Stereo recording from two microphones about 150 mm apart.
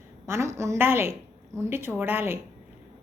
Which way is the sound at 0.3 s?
20° right (ahead or behind).